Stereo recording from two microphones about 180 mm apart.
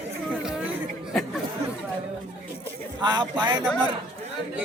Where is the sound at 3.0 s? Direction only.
25° right (ahead or behind).